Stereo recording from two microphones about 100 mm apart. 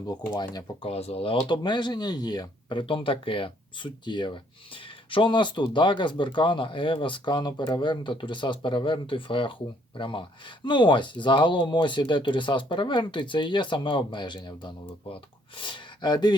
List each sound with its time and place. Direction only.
0.1 s speech: 40° left (ahead or behind)
0.8 s speech: 90° left
1.5 s speech: 50° left (ahead or behind)